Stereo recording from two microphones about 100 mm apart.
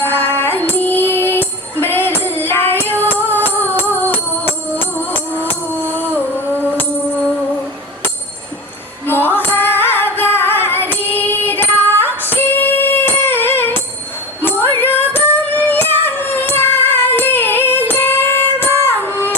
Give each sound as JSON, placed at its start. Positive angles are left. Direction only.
{"t": 0.0, "sound": "music", "side_deg": 20}
{"t": 4.9, "sound": "tambourine", "side_deg": 20}
{"t": 6.0, "sound": "a sound", "side_deg": 20}
{"t": 9.0, "sound": "music", "side_deg": 20}